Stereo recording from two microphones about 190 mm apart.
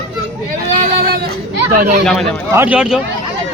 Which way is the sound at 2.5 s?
10° right (ahead or behind).